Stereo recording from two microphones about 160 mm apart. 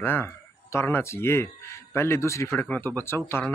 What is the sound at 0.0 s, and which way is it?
Speech, 15° left (ahead or behind).